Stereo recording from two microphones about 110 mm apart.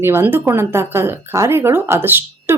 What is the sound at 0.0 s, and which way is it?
Speech, 20° right (ahead or behind).